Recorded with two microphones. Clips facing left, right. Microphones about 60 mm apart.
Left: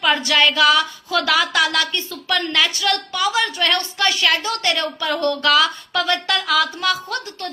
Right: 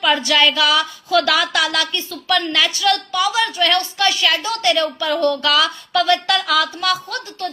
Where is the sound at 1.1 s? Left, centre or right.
Left.